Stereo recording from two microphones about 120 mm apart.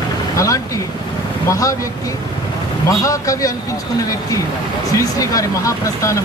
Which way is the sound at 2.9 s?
25° left (ahead or behind).